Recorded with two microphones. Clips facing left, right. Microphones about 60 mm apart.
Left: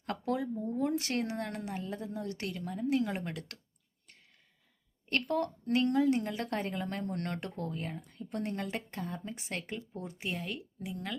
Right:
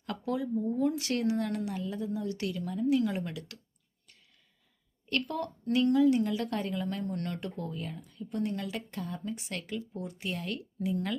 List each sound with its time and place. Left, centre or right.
0.0 s a woman's voice: left
5.0 s a woman's voice: left
10.3 s a woman's voice: centre